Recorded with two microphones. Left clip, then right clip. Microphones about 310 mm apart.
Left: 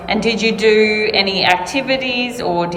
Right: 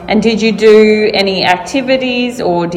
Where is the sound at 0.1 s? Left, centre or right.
Centre.